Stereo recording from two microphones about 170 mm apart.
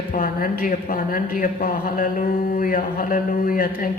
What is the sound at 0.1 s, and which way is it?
Mantra, 55° left (ahead or behind).